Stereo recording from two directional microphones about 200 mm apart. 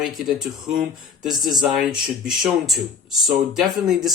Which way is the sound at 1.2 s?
Centre (ahead or behind).